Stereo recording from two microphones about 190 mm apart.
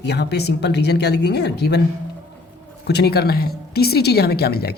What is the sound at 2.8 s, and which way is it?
Speech, 60° left (ahead or behind).